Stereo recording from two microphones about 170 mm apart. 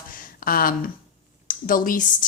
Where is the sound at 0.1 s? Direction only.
55° left (ahead or behind).